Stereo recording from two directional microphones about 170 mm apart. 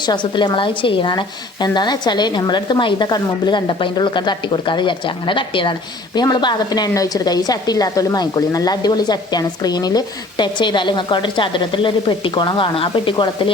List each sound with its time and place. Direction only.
0.0 s a woman's voice: 25° left (ahead or behind)